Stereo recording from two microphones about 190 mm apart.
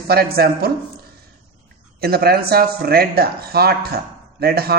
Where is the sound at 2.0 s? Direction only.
55° right (ahead or behind).